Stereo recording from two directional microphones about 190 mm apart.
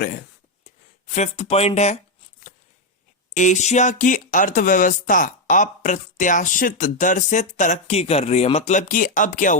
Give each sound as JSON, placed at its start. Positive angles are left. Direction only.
{"t": 1.0, "sound": "speech", "side_deg": 40}
{"t": 3.3, "sound": "speech", "side_deg": 40}